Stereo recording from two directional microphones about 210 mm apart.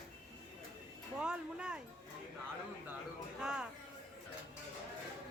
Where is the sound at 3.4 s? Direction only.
5° right (ahead or behind).